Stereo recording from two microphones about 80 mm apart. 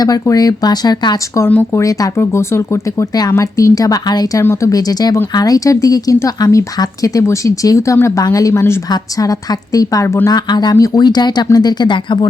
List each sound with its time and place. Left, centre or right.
0.0 s speech: left
1.7 s a woman's voice: left
10.2 s speech: left